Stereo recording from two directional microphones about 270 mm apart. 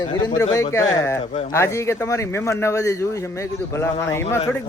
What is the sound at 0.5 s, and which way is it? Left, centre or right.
Speech, centre.